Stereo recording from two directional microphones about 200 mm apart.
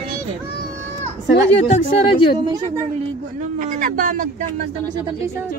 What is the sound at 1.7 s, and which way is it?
Speech, 25° left (ahead or behind).